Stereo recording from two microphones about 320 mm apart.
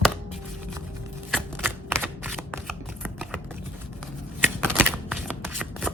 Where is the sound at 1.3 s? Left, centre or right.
Centre.